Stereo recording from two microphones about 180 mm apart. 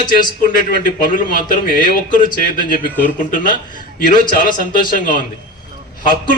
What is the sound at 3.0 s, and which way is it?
Speech, 50° left (ahead or behind).